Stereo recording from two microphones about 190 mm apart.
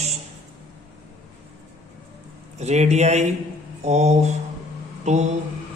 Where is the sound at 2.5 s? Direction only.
35° right (ahead or behind).